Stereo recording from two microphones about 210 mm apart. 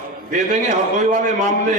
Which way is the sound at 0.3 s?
35° right (ahead or behind).